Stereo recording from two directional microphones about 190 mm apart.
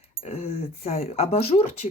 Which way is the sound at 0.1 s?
30° left (ahead or behind).